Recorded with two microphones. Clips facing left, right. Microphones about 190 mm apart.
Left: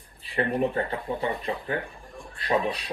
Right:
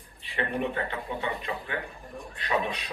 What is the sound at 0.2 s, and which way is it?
Speech, 35° left (ahead or behind).